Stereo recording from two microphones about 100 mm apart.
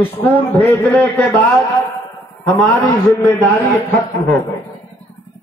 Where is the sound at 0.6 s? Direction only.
25° left (ahead or behind).